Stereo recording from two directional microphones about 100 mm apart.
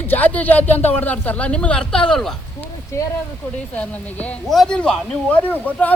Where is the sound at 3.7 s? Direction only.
15° left (ahead or behind).